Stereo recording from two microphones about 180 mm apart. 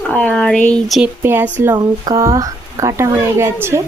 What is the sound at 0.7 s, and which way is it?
Speech, centre (ahead or behind).